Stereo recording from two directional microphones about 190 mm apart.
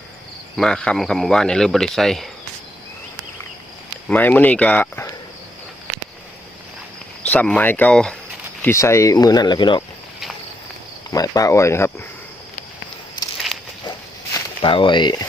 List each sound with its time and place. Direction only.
0.5 s speech: 5° left (ahead or behind)
4.1 s speech: 10° left (ahead or behind)
7.2 s speech: 5° left (ahead or behind); by 9.8 s 25° left (ahead or behind)
11.1 s speech: 20° left (ahead or behind)
14.3 s speech: 25° left (ahead or behind)